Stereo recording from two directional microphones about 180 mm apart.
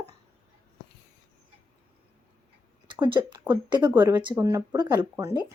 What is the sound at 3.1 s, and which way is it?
Speech, 25° right (ahead or behind).